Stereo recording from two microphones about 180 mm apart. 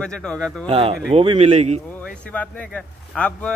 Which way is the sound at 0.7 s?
30° right (ahead or behind).